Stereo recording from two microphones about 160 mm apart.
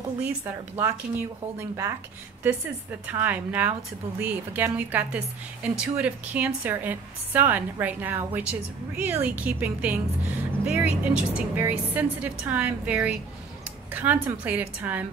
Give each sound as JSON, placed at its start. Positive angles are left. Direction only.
{"t": 1.6, "sound": "a woman's voice", "side_deg": -20}